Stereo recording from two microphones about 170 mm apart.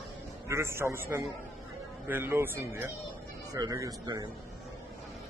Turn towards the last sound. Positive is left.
turn(degrees=-25)  # may be behind; listen again after turning